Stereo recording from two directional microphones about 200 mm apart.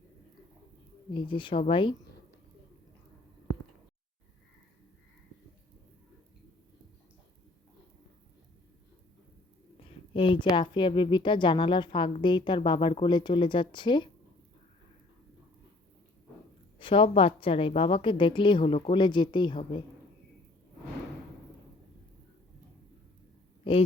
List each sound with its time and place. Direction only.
1.1 s a woman's voice: 25° left (ahead or behind)
9.8 s a woman's voice: 25° left (ahead or behind)
16.7 s a woman's voice: 25° left (ahead or behind)